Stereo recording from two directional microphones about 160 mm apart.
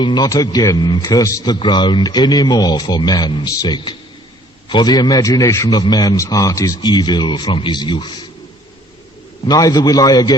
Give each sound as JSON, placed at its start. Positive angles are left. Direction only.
{"t": 0.0, "sound": "a man's voice", "side_deg": 25}
{"t": 9.5, "sound": "a man's voice", "side_deg": 25}